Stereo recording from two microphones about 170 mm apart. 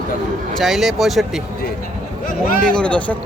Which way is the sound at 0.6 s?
Centre (ahead or behind).